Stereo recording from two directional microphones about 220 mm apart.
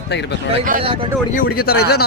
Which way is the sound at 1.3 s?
45° left (ahead or behind).